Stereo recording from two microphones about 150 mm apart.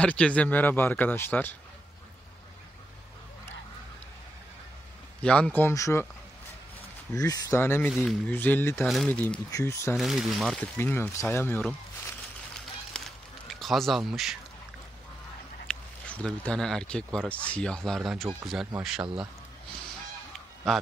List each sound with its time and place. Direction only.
0.0 s a man's voice: 10° left (ahead or behind)
5.2 s a man's voice: 5° left (ahead or behind)
7.2 s speech: 25° left (ahead or behind)
7.9 s speech: 5° right (ahead or behind)
8.3 s a man's voice: 10° left (ahead or behind)
8.8 s speech: centre (ahead or behind)
9.5 s speech: 20° left (ahead or behind)
9.9 s speech: centre (ahead or behind)
10.8 s a man's voice: 15° left (ahead or behind)
12.9 s a sound: 5° left (ahead or behind)
13.5 s speech: centre (ahead or behind)
15.7 s speech: 5° left (ahead or behind)